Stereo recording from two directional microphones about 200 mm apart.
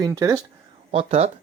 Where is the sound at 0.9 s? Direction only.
30° right (ahead or behind).